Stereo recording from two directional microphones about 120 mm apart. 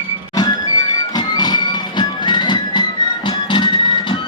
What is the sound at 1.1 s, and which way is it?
Music, 35° left (ahead or behind).